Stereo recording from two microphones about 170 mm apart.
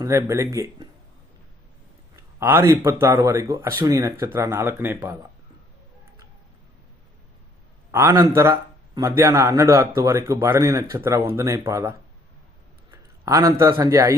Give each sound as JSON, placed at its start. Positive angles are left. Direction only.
{"t": 0.0, "sound": "speech", "side_deg": -20}
{"t": 2.1, "sound": "speech", "side_deg": -15}
{"t": 7.9, "sound": "a man's voice", "side_deg": -15}